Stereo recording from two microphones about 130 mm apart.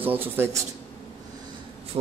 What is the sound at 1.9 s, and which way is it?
Speech, 45° right (ahead or behind).